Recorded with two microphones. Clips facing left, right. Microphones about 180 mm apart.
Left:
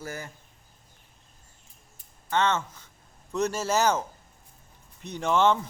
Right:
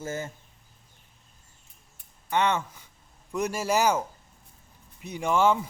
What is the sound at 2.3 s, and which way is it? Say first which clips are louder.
Speech: even; 15° right (ahead or behind).